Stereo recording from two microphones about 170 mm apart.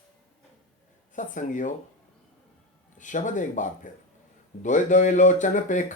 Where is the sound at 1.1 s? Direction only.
50° left (ahead or behind).